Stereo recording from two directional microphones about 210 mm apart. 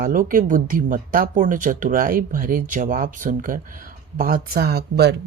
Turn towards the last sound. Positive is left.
turn(degrees=-50)  # may be behind; listen again after turning